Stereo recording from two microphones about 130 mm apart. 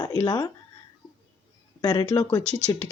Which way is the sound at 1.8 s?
30° left (ahead or behind).